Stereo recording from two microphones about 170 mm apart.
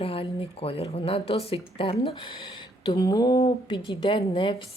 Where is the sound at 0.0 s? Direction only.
35° left (ahead or behind).